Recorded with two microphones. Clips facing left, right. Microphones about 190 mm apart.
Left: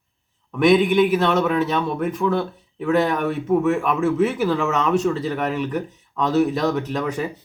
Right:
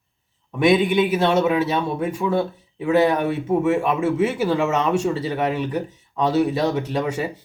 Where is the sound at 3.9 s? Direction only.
10° right (ahead or behind).